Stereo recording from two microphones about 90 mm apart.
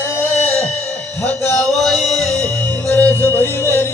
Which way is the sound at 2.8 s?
20° left (ahead or behind).